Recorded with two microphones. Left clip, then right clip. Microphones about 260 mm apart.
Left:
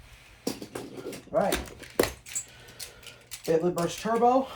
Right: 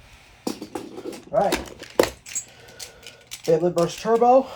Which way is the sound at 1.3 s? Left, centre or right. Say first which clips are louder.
Right 5 dB; right.